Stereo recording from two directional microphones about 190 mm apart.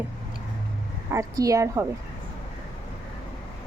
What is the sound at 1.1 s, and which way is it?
Speech, 15° right (ahead or behind).